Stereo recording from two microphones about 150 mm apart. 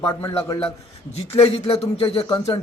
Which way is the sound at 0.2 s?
15° left (ahead or behind).